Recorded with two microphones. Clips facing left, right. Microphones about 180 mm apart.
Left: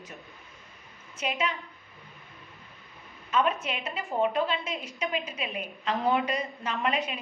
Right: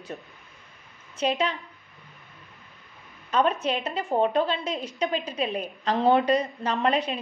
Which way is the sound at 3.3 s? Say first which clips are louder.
Right 4 dB; 35° right (ahead or behind).